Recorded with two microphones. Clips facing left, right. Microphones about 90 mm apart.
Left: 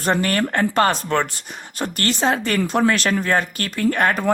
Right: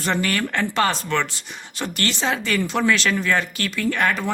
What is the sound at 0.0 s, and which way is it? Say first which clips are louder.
Speech: left 3 dB; 40° left (ahead or behind).